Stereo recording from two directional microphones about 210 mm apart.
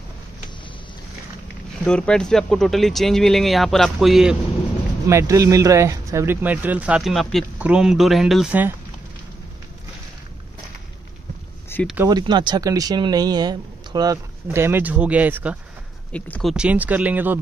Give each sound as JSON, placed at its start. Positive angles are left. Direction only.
{"t": 1.9, "sound": "speech", "side_deg": 5}
{"t": 5.0, "sound": "speech", "side_deg": -15}
{"t": 11.7, "sound": "a sound", "side_deg": 10}
{"t": 12.1, "sound": "speech", "side_deg": -20}
{"t": 16.1, "sound": "speech", "side_deg": 5}